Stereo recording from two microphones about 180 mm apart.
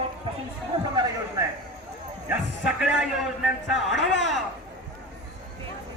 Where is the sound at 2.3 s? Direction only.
5° right (ahead or behind).